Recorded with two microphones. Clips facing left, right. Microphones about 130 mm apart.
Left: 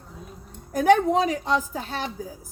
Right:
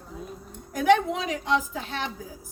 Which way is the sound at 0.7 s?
40° left (ahead or behind).